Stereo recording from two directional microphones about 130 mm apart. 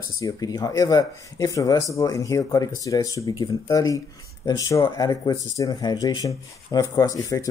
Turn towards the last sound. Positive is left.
turn(degrees=25)  # may be behind; listen again after turning